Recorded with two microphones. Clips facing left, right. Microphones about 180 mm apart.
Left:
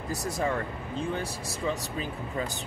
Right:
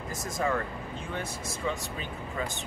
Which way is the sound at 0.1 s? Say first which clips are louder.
Left 1 dB; 35° left (ahead or behind).